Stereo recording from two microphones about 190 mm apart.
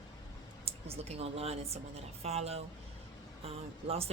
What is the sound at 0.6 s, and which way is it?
A woman's voice, 30° right (ahead or behind).